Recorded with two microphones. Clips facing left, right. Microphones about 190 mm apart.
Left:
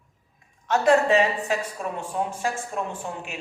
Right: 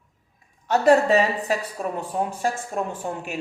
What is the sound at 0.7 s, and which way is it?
Speech, 40° right (ahead or behind).